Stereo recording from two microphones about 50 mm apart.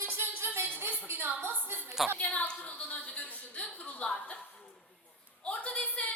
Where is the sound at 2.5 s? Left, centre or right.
Left.